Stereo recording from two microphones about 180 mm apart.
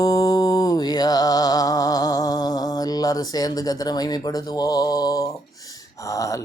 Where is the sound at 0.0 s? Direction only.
20° left (ahead or behind).